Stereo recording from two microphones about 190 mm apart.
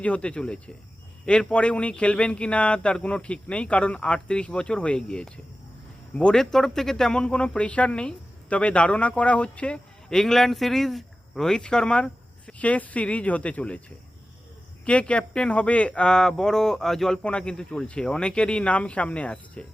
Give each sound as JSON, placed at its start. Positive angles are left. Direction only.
{"t": 0.0, "sound": "speech", "side_deg": 5}
{"t": 14.8, "sound": "speech", "side_deg": 5}